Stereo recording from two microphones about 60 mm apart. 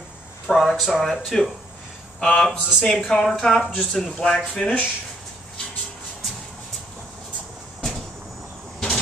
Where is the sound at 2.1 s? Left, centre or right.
Centre.